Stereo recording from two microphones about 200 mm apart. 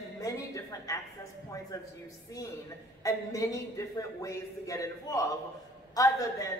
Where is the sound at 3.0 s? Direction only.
15° left (ahead or behind).